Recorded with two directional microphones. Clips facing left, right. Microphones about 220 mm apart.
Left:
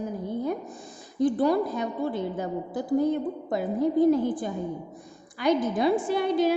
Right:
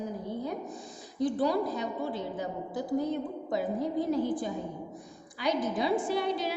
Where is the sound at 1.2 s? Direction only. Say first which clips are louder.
Left 5 dB; 55° left (ahead or behind).